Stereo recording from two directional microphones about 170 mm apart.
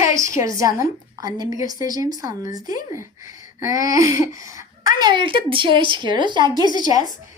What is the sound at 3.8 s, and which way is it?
Speech, 20° right (ahead or behind).